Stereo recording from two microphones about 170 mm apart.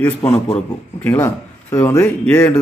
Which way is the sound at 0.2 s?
15° left (ahead or behind).